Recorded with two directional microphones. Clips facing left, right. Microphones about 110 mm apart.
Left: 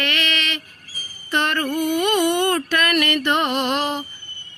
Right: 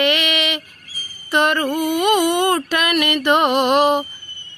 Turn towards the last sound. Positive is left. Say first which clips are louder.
# right 7 dB
turn(degrees=-15)  # may be behind; listen again after turning